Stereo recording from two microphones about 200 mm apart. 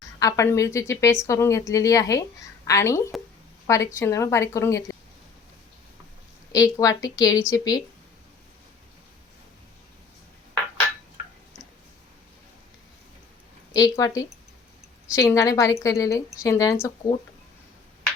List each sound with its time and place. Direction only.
0.2 s a woman's voice: 15° left (ahead or behind)
6.5 s a woman's voice: 20° left (ahead or behind)
13.7 s a woman's voice: 15° left (ahead or behind)